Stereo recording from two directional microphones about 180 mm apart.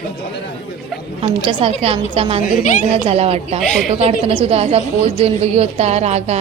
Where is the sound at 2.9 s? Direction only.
35° right (ahead or behind).